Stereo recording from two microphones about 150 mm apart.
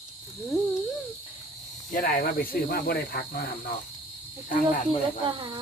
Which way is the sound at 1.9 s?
70° left (ahead or behind).